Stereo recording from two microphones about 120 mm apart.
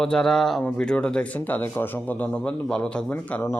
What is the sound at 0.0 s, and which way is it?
Speech, 5° left (ahead or behind).